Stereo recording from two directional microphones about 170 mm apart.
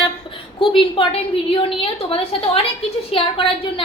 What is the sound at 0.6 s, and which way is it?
A woman's voice, 30° left (ahead or behind).